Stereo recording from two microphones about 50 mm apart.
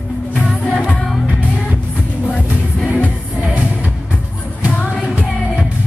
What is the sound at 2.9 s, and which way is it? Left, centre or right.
Music, right.